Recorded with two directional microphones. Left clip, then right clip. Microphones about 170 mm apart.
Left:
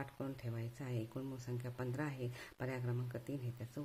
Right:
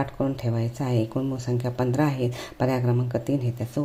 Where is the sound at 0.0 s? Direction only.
5° right (ahead or behind).